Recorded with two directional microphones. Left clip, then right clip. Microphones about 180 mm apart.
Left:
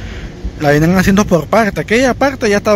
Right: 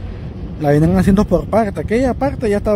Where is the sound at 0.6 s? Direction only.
10° right (ahead or behind).